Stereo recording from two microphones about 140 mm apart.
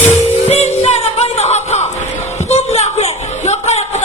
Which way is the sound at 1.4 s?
50° left (ahead or behind).